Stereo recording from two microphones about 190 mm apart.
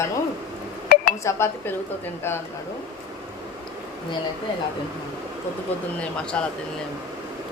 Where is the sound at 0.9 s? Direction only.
50° left (ahead or behind).